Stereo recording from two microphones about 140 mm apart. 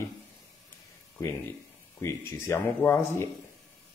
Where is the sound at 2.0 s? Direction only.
20° left (ahead or behind).